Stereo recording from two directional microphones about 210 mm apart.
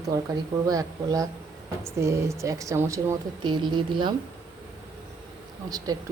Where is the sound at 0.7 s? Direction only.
15° right (ahead or behind).